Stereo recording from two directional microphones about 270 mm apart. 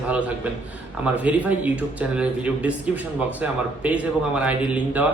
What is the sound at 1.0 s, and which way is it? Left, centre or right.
Speech, centre.